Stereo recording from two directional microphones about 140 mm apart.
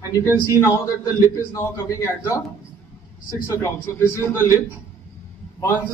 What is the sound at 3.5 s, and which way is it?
A man's voice, 20° left (ahead or behind).